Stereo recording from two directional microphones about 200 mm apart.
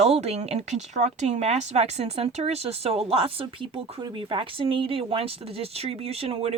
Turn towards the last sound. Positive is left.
turn(degrees=-30)  # may be behind; listen again after turning